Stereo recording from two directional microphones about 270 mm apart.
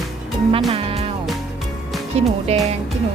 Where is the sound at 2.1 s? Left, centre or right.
Right.